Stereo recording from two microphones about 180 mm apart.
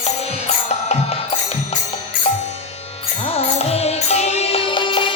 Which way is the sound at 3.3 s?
35° left (ahead or behind).